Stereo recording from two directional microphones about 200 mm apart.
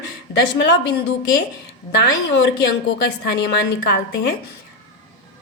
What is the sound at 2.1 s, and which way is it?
Speech, 60° left (ahead or behind).